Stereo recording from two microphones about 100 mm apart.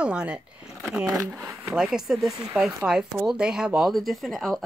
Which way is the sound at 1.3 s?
20° right (ahead or behind).